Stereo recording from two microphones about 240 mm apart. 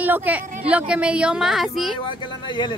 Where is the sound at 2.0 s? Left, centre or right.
Centre.